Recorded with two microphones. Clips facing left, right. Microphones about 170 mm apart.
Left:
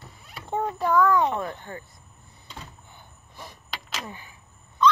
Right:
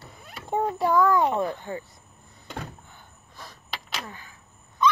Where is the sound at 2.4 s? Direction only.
60° right (ahead or behind).